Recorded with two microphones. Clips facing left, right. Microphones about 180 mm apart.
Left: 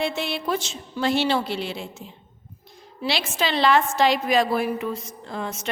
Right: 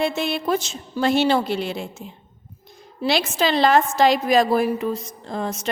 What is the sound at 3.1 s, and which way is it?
A woman's voice, 45° right (ahead or behind).